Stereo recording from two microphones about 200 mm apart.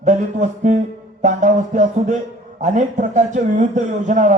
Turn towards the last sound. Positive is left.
turn(degrees=-40)  # may be behind; listen again after turning